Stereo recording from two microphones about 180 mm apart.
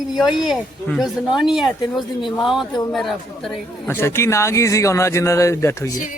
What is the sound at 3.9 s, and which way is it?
A man's voice, 15° left (ahead or behind).